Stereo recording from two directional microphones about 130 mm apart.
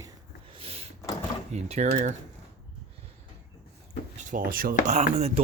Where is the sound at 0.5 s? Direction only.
50° right (ahead or behind).